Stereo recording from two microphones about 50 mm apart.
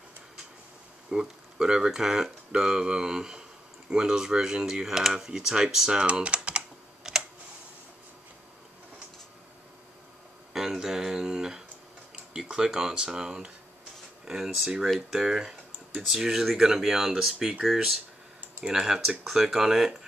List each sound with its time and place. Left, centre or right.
1.1 s speech: centre
6.0 s typing: right
10.5 s a sound: centre
12.4 s speech: centre